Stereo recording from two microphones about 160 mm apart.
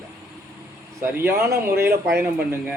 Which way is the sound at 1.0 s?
15° right (ahead or behind).